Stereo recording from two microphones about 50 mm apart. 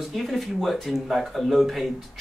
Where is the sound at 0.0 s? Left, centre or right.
Centre.